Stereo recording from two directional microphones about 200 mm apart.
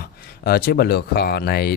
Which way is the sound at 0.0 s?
50° left (ahead or behind).